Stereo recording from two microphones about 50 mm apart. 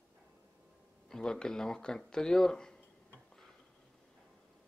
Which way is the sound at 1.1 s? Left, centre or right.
Centre.